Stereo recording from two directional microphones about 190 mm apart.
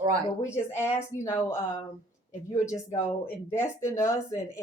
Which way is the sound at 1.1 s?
15° right (ahead or behind).